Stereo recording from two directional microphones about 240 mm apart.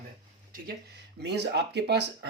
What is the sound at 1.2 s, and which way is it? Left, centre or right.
Speech, right.